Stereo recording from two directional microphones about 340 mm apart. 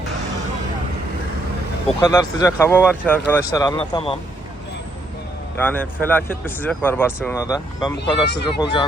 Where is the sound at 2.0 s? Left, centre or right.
Centre.